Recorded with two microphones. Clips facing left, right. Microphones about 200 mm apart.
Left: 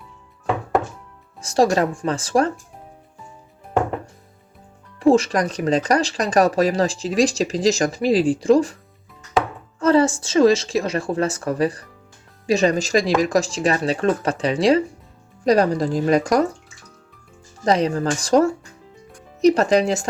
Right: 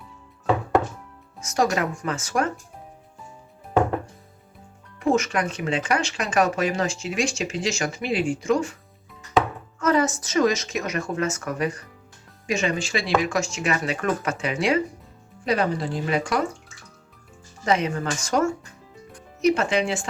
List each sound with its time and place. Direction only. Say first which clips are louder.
1.4 s speech: left 6 dB; 30° left (ahead or behind)
4.9 s speech: left 6 dB; 30° left (ahead or behind)
9.8 s speech: left 5 dB; 30° left (ahead or behind)
17.7 s speech: left 5 dB; 35° left (ahead or behind)